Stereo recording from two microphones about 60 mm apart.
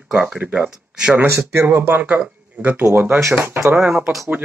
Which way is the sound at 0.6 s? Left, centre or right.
Centre.